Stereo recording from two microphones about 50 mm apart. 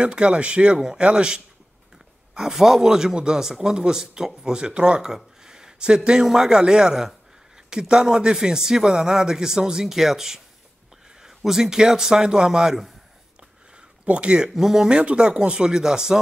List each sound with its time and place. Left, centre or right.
0.0 s speech: centre
0.7 s a man's voice: centre
13.7 s a sound: right
14.5 s a man's voice: centre
14.9 s a man's voice: centre